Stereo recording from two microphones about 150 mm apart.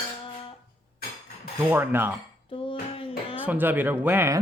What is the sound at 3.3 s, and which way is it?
Speech, 10° right (ahead or behind).